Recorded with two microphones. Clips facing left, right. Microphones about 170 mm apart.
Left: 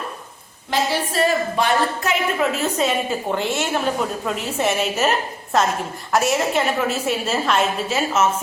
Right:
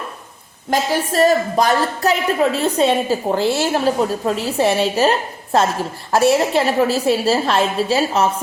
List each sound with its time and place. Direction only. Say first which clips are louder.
0.7 s a woman's voice: right 3 dB; 45° right (ahead or behind)